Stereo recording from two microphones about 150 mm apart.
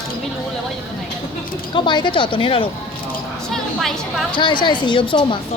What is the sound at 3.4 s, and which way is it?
Speech, 5° left (ahead or behind).